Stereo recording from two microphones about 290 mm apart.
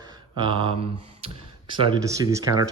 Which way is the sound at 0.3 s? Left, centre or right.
Centre.